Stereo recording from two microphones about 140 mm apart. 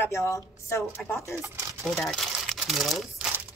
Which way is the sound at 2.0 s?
5° left (ahead or behind).